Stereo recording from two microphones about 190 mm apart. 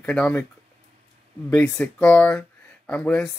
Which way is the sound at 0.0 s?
5° left (ahead or behind).